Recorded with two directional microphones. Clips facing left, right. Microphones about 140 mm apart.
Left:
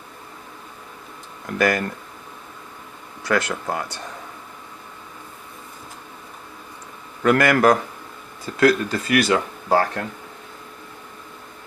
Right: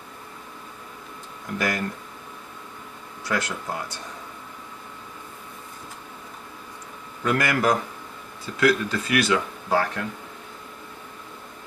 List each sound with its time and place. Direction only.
1.5 s speech: 70° left (ahead or behind)
3.2 s speech: 70° left (ahead or behind)
7.2 s a man's voice: 65° left (ahead or behind)
8.6 s speech: 40° left (ahead or behind)